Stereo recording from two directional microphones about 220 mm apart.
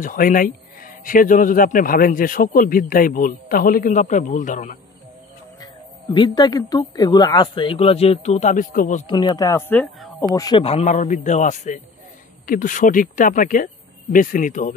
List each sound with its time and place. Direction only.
0.0 s speech: 40° left (ahead or behind)
5.6 s speech: 20° left (ahead or behind)
9.1 s speech: 20° left (ahead or behind)
10.2 s speech: 20° left (ahead or behind); by 14.7 s 35° left (ahead or behind)